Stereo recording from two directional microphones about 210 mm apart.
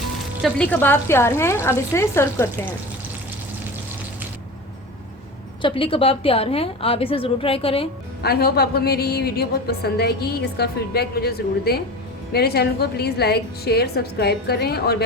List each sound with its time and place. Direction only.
0.4 s speech: 5° left (ahead or behind)
5.6 s a woman's voice: 25° left (ahead or behind)
8.2 s a woman's voice: 50° left (ahead or behind)